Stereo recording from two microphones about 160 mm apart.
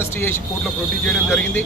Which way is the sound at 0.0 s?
15° left (ahead or behind).